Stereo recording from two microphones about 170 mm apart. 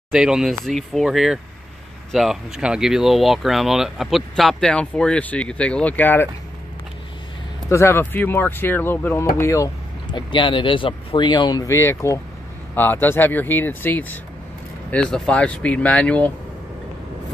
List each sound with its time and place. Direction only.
0.1 s speech: 5° right (ahead or behind)
7.7 s speech: 15° left (ahead or behind)
10.1 s speech: 30° left (ahead or behind); by 16.3 s 10° left (ahead or behind)